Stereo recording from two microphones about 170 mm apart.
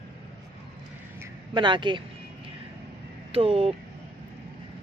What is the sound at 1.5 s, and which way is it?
Speech, 25° right (ahead or behind).